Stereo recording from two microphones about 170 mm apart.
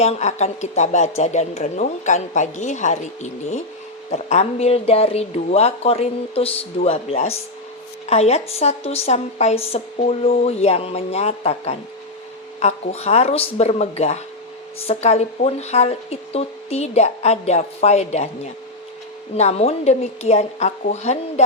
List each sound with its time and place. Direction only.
0.0 s a woman's voice: 40° left (ahead or behind)